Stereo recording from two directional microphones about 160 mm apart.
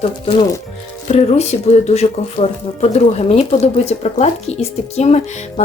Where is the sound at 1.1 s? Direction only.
40° left (ahead or behind).